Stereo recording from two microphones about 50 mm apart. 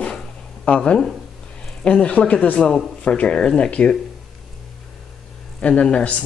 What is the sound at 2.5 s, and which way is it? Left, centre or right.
Speech, centre.